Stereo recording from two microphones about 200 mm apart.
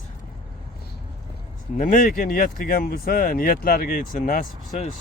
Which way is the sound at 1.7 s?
40° left (ahead or behind).